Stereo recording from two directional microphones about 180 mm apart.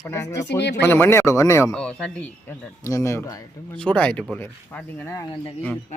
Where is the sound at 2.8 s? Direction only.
15° left (ahead or behind).